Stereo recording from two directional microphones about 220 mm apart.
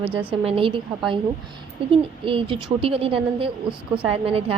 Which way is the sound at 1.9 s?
25° right (ahead or behind).